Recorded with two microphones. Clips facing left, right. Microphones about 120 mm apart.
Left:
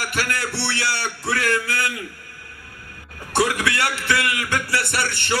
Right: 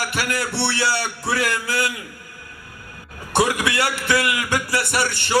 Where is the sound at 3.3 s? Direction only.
20° right (ahead or behind).